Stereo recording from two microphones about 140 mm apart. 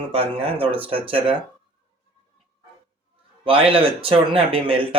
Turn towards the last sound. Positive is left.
turn(degrees=-40)  # may be behind; listen again after turning